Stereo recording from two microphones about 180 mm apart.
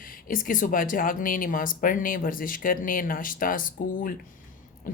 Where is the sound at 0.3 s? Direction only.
50° left (ahead or behind).